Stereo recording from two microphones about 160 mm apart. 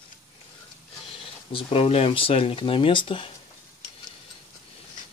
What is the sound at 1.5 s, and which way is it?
Speech, 35° left (ahead or behind).